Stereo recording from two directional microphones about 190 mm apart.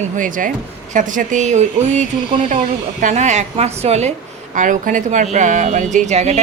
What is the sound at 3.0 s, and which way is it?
Speech, 40° right (ahead or behind).